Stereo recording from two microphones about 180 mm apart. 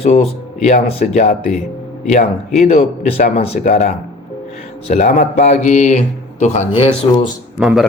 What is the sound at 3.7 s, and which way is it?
Speech, 50° left (ahead or behind).